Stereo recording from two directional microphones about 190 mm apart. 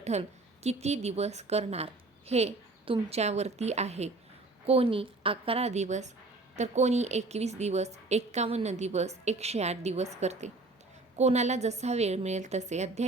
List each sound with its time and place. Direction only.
0.0 s a woman's voice: 35° right (ahead or behind)